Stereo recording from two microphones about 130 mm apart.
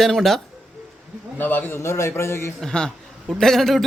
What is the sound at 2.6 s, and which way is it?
A man's voice, 5° left (ahead or behind).